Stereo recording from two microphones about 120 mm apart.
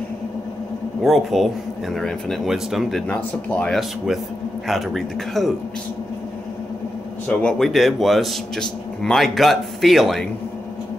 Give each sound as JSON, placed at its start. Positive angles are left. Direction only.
{"t": 1.0, "sound": "a man's voice", "side_deg": 0}
{"t": 3.1, "sound": "speech", "side_deg": 10}
{"t": 3.7, "sound": "a man's voice", "side_deg": -5}
{"t": 7.2, "sound": "a man's voice", "side_deg": 5}